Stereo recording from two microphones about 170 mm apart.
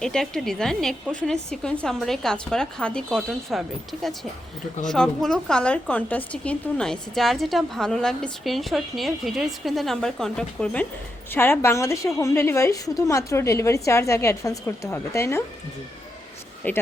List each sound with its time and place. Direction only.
0.0 s a woman's voice: 5° left (ahead or behind)
4.9 s a woman's voice: 5° left (ahead or behind)
16.6 s a woman's voice: 10° left (ahead or behind)